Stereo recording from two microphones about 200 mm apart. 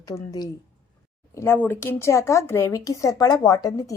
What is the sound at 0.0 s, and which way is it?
Speech, 15° left (ahead or behind).